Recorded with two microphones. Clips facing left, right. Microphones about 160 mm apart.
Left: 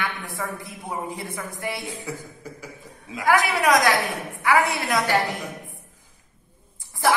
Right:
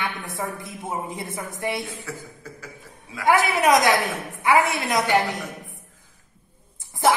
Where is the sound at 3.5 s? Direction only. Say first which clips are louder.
Right 1 dB; 20° right (ahead or behind).